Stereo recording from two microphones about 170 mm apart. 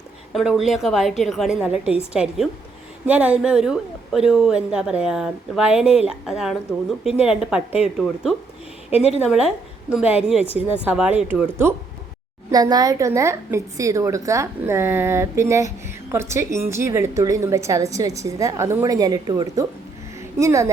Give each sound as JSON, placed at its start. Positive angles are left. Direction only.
{"t": 0.3, "sound": "a woman's voice", "side_deg": 0}
{"t": 8.9, "sound": "a woman's voice", "side_deg": 40}
{"t": 9.9, "sound": "a woman's voice", "side_deg": -5}